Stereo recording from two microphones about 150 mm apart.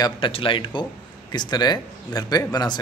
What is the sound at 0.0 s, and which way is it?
Speech, 35° left (ahead or behind).